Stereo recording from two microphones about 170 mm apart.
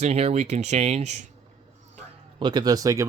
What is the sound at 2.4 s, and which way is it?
Speech, 25° right (ahead or behind).